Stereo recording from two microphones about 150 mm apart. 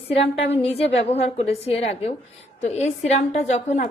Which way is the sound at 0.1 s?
40° left (ahead or behind).